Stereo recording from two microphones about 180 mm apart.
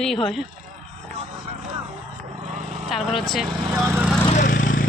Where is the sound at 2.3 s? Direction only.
40° right (ahead or behind).